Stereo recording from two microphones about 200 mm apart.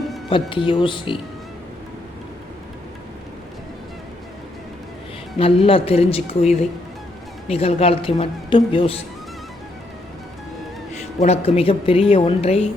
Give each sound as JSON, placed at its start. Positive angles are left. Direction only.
{"t": 0.3, "sound": "speech", "side_deg": 25}
{"t": 5.4, "sound": "speech", "side_deg": 30}
{"t": 11.2, "sound": "speech", "side_deg": 30}